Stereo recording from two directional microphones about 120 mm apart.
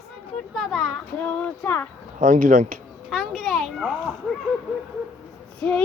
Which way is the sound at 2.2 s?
90° right.